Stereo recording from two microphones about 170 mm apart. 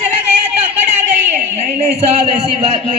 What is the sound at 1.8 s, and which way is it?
Speech, 35° right (ahead or behind).